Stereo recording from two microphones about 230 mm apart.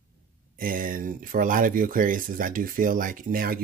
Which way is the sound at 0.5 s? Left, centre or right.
Right.